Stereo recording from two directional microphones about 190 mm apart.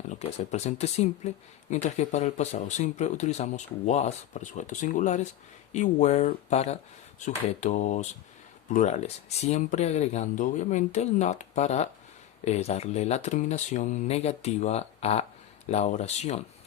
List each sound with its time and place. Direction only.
0.1 s speech: 35° left (ahead or behind)